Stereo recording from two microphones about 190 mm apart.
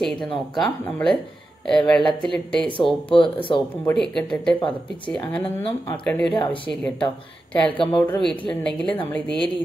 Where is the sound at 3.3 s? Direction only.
25° left (ahead or behind).